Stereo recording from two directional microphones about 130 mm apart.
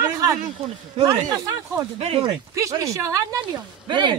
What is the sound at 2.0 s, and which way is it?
Speech, 50° right (ahead or behind).